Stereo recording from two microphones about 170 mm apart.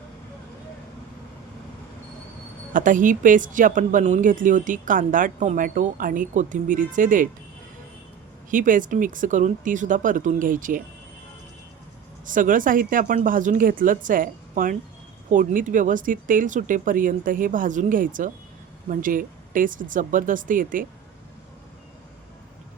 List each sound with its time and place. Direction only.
2.7 s speech: 50° right (ahead or behind)
8.4 s speech: 50° right (ahead or behind)
12.2 s speech: 50° right (ahead or behind)